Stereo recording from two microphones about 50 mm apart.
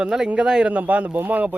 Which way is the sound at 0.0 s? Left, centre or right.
Centre.